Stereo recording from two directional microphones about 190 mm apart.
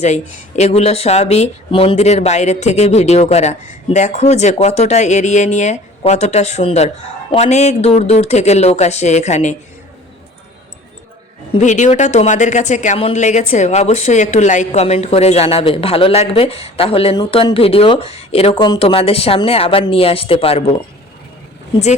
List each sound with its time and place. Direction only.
0.0 s speech: 35° left (ahead or behind)
11.5 s speech: 40° left (ahead or behind)